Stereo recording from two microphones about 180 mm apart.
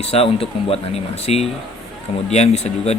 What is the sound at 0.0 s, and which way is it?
Speech, 35° left (ahead or behind).